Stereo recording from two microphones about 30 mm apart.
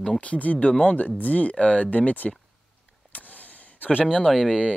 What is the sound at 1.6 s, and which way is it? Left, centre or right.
Speech, left.